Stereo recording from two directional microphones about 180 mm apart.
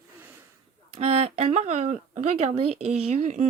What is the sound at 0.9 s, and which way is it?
Speech, 35° right (ahead or behind).